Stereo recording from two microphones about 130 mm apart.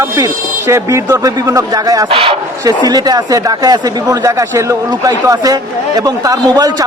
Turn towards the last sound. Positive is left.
turn(degrees=-30)  # may be behind; listen again after turning